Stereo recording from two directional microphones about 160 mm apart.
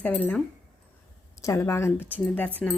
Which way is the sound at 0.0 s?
10° left (ahead or behind).